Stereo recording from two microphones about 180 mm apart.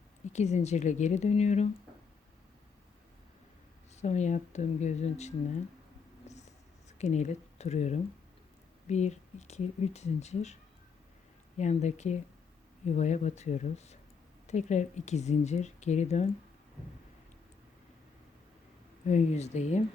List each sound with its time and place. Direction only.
0.3 s speech: 40° left (ahead or behind)
3.9 s speech: 40° left (ahead or behind)
6.2 s a sound: 40° left (ahead or behind)
7.0 s speech: 40° left (ahead or behind)
19.0 s speech: 40° left (ahead or behind)